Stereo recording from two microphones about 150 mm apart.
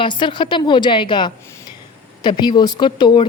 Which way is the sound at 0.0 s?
30° left (ahead or behind).